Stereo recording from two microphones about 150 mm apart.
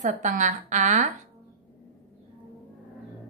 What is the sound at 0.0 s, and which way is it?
A woman's voice, 55° right (ahead or behind).